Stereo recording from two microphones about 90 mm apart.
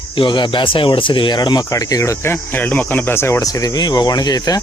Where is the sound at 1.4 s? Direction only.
50° left (ahead or behind); by 3.4 s 30° left (ahead or behind).